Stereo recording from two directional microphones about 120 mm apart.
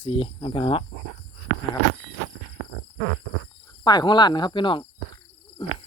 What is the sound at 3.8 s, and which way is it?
Speech, 35° left (ahead or behind).